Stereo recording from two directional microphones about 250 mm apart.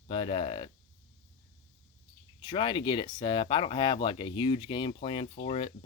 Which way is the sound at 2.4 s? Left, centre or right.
Centre.